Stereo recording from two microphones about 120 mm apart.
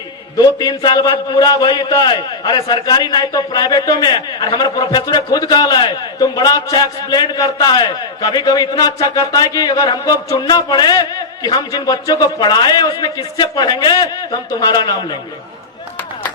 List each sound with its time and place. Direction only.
0.3 s a man's voice: 35° left (ahead or behind)